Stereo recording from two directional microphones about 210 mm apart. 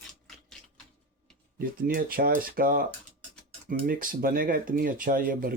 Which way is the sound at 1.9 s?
45° right (ahead or behind).